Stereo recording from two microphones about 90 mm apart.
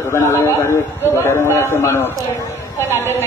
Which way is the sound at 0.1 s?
30° left (ahead or behind).